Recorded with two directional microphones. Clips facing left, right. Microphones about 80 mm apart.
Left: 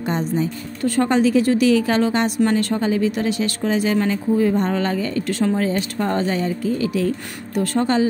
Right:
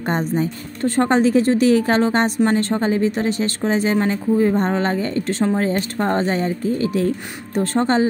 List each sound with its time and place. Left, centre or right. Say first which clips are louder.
0.0 s speech: right 1 dB; right
5.6 s speech: right 1 dB; right